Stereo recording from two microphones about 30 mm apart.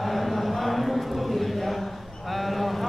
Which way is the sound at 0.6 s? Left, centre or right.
Centre.